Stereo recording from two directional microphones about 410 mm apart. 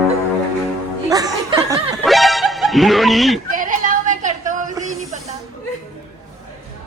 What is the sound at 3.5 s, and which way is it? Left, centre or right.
Music, centre.